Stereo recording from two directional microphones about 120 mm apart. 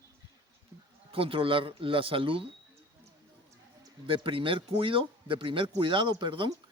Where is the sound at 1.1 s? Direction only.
50° right (ahead or behind).